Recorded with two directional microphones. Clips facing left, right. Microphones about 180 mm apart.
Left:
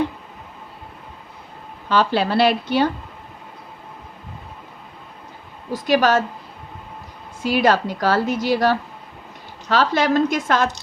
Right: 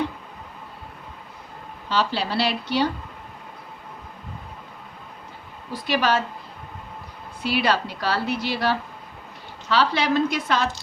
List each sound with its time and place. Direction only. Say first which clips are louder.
1.9 s a woman's voice: left 6 dB; 55° left (ahead or behind)
5.7 s a woman's voice: left 5 dB; 45° left (ahead or behind)
7.4 s a woman's voice: left 5 dB; 45° left (ahead or behind)